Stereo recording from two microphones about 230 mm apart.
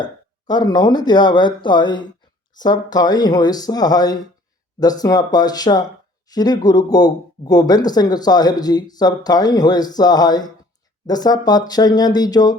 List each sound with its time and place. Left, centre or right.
0.0 s speech: centre